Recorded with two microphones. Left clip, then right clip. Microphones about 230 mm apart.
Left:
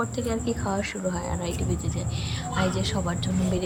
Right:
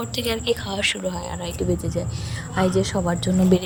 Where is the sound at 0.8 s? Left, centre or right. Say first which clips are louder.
Right 6 dB; right.